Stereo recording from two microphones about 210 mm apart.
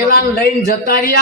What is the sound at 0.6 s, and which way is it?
Speech, 45° left (ahead or behind).